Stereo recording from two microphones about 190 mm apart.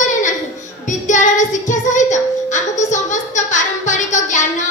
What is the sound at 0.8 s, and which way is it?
Child singing, 40° left (ahead or behind).